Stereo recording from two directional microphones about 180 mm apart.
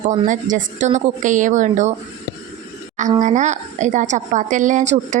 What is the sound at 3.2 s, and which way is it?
A woman's voice, 40° right (ahead or behind).